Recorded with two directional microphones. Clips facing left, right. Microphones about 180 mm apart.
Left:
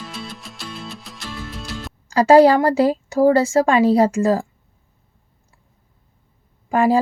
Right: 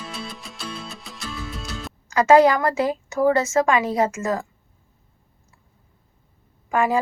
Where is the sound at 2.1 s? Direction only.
35° left (ahead or behind).